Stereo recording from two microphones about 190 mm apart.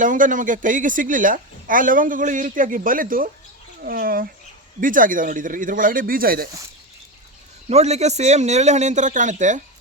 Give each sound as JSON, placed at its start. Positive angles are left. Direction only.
{"t": 0.0, "sound": "speech", "side_deg": -45}
{"t": 7.7, "sound": "a man's voice", "side_deg": -35}